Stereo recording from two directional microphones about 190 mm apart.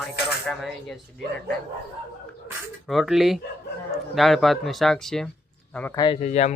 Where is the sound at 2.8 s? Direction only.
Centre (ahead or behind).